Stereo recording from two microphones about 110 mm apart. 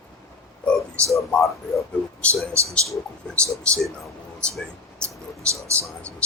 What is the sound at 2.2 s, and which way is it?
Speech, 10° left (ahead or behind).